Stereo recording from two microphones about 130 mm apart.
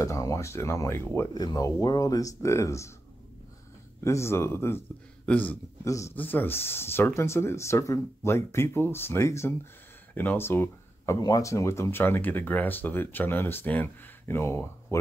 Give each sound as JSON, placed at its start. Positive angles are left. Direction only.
{"t": 0.0, "sound": "speech", "side_deg": 25}
{"t": 1.3, "sound": "speech", "side_deg": 30}
{"t": 4.0, "sound": "speech", "side_deg": 20}
{"t": 5.9, "sound": "speech", "side_deg": 25}
{"t": 11.1, "sound": "speech", "side_deg": 30}